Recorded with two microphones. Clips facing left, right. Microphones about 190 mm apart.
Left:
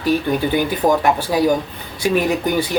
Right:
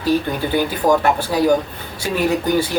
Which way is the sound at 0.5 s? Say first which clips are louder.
Right 3 dB; 15° left (ahead or behind).